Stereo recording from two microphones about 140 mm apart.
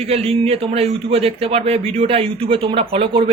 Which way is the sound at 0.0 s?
45° right (ahead or behind).